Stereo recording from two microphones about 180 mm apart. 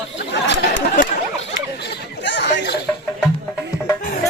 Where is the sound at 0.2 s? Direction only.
75° left (ahead or behind).